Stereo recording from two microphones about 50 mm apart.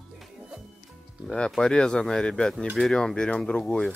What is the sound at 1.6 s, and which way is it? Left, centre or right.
Speech, centre.